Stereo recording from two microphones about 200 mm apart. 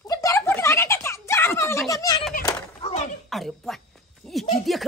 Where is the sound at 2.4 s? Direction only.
30° left (ahead or behind).